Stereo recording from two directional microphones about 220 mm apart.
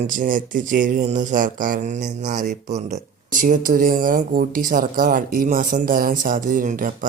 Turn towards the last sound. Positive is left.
turn(degrees=-35)  # may be behind; listen again after turning